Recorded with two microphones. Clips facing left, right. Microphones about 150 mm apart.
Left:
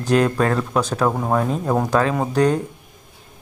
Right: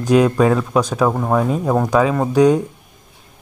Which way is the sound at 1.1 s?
Centre (ahead or behind).